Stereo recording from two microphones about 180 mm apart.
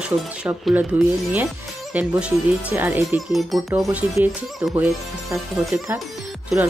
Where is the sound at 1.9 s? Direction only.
5° right (ahead or behind).